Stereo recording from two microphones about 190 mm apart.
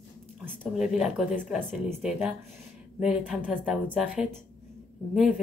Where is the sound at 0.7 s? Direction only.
Centre (ahead or behind).